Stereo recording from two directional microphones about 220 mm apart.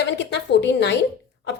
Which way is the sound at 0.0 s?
50° left (ahead or behind).